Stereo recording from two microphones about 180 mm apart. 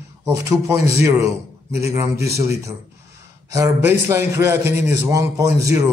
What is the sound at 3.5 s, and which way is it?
A man's voice, 15° right (ahead or behind).